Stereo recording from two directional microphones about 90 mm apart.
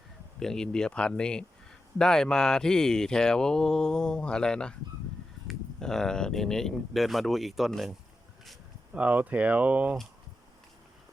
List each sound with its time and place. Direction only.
0.3 s speech: 5° left (ahead or behind)
8.9 s speech: 15° right (ahead or behind)